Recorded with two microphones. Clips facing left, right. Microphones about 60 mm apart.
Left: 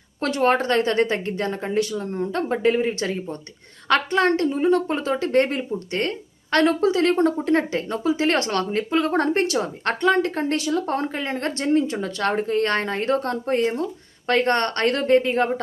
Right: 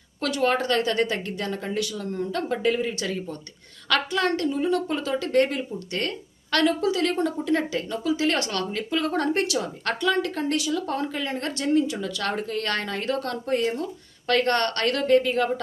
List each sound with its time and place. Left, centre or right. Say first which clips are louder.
0.2 s a woman's voice: left 3 dB; left